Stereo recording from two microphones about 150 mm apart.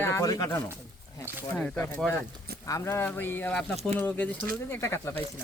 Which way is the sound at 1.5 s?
10° left (ahead or behind).